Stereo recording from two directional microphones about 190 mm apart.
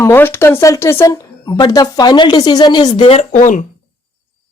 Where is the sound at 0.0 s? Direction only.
10° left (ahead or behind); by 3.7 s 40° left (ahead or behind).